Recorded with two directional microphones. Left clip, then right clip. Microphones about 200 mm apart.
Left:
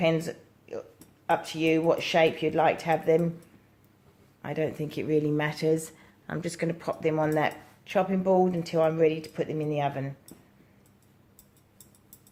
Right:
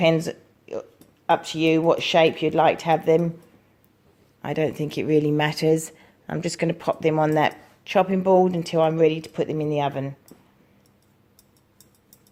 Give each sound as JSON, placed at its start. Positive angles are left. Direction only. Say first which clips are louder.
{"t": 0.0, "sound": "a sound", "louder": "right 6 dB", "side_deg": -45}
{"t": 1.3, "sound": "speech", "louder": "right 5 dB", "side_deg": -45}
{"t": 4.4, "sound": "speech", "louder": "right 6 dB", "side_deg": -45}